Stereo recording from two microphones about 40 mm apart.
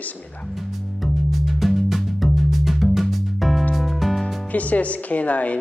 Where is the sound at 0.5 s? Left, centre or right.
Centre.